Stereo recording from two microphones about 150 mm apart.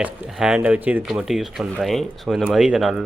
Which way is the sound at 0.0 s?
5° right (ahead or behind).